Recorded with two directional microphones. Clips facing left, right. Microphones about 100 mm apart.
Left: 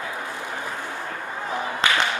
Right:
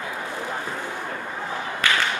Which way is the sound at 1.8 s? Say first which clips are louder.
Left 1 dB; 20° left (ahead or behind).